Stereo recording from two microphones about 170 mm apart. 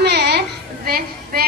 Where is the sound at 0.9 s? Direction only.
65° right (ahead or behind).